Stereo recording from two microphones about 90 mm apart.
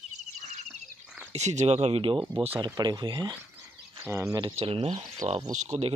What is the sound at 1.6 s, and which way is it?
Speech, 90° right.